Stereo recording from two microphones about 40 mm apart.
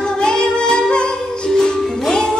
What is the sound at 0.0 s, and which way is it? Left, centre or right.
Music, centre.